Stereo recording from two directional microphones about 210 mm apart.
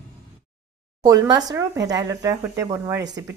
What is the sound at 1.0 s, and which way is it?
Speech, 20° right (ahead or behind).